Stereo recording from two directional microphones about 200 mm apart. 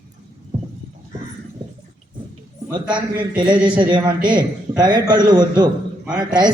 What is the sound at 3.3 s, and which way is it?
A woman's voice, 25° right (ahead or behind).